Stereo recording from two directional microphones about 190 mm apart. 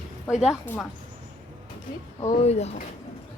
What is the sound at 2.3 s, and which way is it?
Speech, 35° left (ahead or behind).